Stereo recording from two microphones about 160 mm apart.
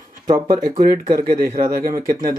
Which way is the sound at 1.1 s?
60° right (ahead or behind).